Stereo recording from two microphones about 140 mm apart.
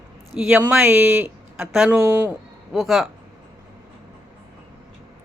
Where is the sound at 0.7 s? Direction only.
15° right (ahead or behind).